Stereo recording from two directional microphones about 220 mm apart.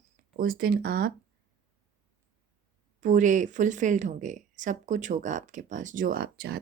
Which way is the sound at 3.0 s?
35° right (ahead or behind).